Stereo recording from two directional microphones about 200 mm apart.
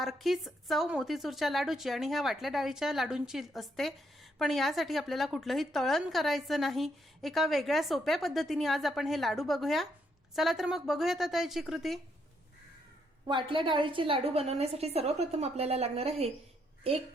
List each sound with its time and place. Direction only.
0.0 s a woman's voice: centre (ahead or behind)
13.2 s a woman's voice: 25° right (ahead or behind)